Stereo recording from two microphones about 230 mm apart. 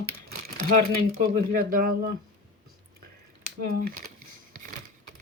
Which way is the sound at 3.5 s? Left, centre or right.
Right.